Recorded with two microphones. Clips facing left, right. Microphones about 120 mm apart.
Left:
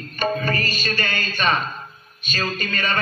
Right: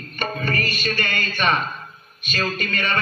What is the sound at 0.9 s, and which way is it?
Speech, 25° left (ahead or behind).